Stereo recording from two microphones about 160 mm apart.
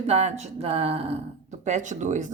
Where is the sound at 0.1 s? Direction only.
45° right (ahead or behind).